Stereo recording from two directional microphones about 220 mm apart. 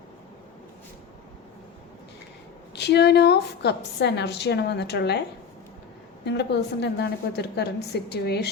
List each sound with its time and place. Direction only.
2.7 s a woman's voice: 50° left (ahead or behind)
6.2 s a woman's voice: 50° left (ahead or behind)